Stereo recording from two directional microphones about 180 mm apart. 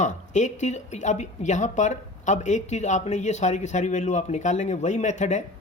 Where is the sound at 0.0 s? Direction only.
40° left (ahead or behind).